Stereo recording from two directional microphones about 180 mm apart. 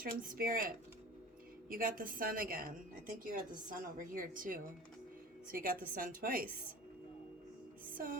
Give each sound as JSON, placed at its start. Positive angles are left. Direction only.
{"t": 0.0, "sound": "a woman's voice", "side_deg": -50}
{"t": 1.7, "sound": "a woman's voice", "side_deg": -50}